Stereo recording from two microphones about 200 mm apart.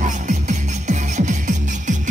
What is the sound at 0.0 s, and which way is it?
Music, 35° right (ahead or behind).